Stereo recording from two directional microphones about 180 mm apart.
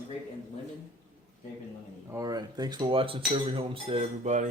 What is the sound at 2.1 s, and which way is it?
Speech, 20° right (ahead or behind).